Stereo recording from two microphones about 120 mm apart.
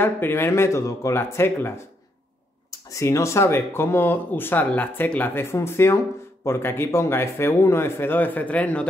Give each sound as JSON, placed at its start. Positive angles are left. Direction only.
{"t": 0.0, "sound": "speech", "side_deg": 20}
{"t": 2.9, "sound": "speech", "side_deg": 25}